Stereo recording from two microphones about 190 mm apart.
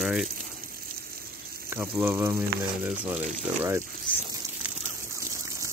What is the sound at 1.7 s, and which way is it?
Speech, 10° right (ahead or behind).